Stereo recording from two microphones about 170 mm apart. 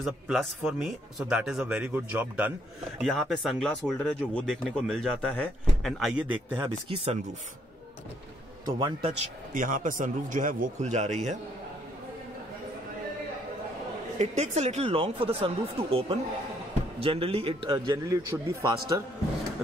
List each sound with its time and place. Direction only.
0.0 s speech: centre (ahead or behind)
3.0 s speech: centre (ahead or behind)
8.6 s a man's voice: 25° right (ahead or behind)
9.2 s speech: 50° right (ahead or behind)
14.1 s speech: 40° right (ahead or behind)
17.7 s a man's voice: 20° right (ahead or behind)